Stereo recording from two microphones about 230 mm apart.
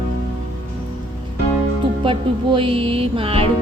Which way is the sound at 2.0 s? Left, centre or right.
Right.